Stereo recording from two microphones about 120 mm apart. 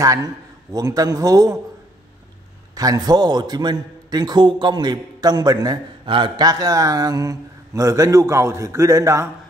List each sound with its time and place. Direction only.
0.0 s a man's voice: 30° right (ahead or behind)
2.7 s a man's voice: 30° right (ahead or behind)